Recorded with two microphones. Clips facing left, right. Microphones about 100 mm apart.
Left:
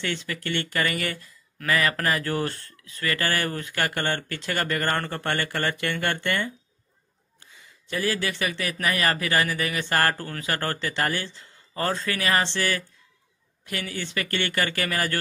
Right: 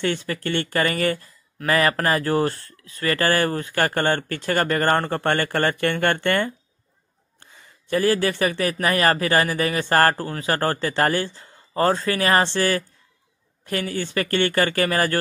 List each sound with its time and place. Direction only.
0.3 s speech: 35° right (ahead or behind)
7.9 s speech: 40° right (ahead or behind)